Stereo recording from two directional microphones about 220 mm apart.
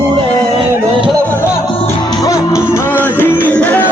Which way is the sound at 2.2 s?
15° left (ahead or behind).